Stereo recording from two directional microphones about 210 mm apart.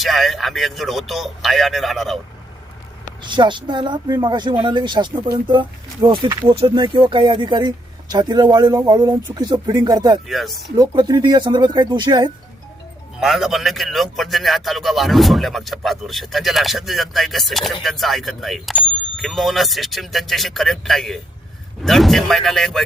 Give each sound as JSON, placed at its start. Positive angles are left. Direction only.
{"t": 0.0, "sound": "a man's voice", "side_deg": 0}
{"t": 3.2, "sound": "speech", "side_deg": -20}
{"t": 10.2, "sound": "a man's voice", "side_deg": 0}
{"t": 10.8, "sound": "speech", "side_deg": -20}
{"t": 13.1, "sound": "a man's voice", "side_deg": 0}